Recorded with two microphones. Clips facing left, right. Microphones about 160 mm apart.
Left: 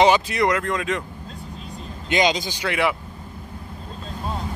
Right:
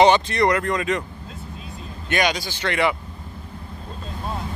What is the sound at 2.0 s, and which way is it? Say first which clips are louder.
Speech: left 2 dB; 20° left (ahead or behind).